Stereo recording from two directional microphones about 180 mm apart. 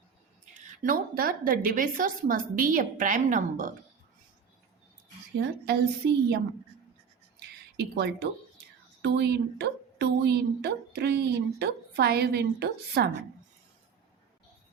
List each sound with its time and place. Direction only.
0.5 s a woman's voice: 45° right (ahead or behind)
5.6 s a woman's voice: 65° right (ahead or behind)
7.3 s a sound: 65° right (ahead or behind)
9.0 s a woman's voice: 70° right (ahead or behind)